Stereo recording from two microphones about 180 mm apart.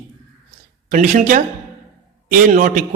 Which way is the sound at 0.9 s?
45° right (ahead or behind).